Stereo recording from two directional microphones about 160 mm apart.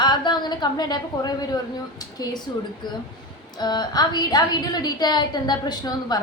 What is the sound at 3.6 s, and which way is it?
A woman's voice, 25° left (ahead or behind).